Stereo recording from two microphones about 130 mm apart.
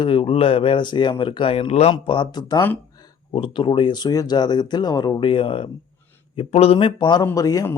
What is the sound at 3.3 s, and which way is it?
A man's voice, 40° left (ahead or behind).